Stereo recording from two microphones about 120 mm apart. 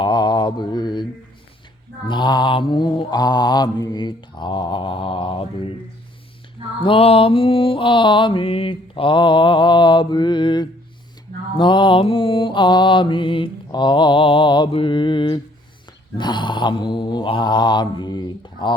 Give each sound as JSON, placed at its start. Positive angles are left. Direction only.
{"t": 0.0, "sound": "mantra", "side_deg": 35}
{"t": 2.0, "sound": "mantra", "side_deg": 40}
{"t": 6.8, "sound": "mantra", "side_deg": 50}